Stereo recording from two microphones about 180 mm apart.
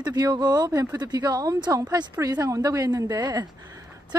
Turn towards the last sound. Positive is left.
turn(degrees=-25)  # may be behind; listen again after turning